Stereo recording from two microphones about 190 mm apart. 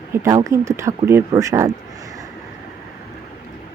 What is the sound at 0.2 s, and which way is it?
Speech, 15° right (ahead or behind).